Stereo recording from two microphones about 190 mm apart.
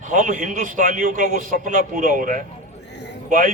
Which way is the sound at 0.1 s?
40° right (ahead or behind).